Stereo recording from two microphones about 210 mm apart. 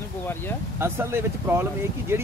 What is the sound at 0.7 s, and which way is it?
Speech, 10° right (ahead or behind).